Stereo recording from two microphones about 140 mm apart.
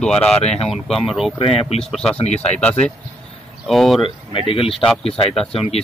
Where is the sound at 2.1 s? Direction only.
50° left (ahead or behind).